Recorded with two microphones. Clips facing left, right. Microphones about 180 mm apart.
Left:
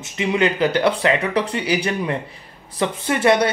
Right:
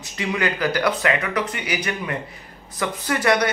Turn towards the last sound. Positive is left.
turn(degrees=25)  # may be behind; listen again after turning